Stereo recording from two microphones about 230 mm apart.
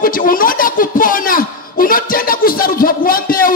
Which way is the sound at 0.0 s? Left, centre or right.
Left.